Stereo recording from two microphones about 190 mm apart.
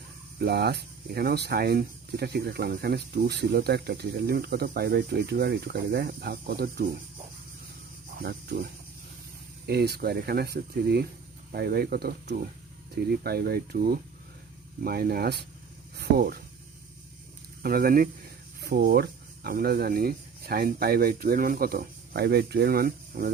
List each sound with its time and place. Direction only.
0.3 s speech: 55° right (ahead or behind)
8.2 s speech: 55° right (ahead or behind)
9.6 s speech: 55° right (ahead or behind)
17.6 s speech: 50° right (ahead or behind)